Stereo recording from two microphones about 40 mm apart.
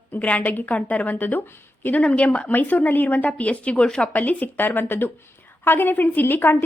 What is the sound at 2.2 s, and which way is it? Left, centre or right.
A woman's voice, left.